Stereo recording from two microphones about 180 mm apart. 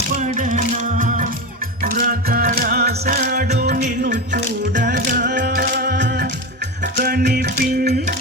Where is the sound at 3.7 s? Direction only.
45° right (ahead or behind).